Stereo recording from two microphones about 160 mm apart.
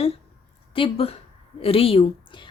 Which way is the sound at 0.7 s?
35° left (ahead or behind).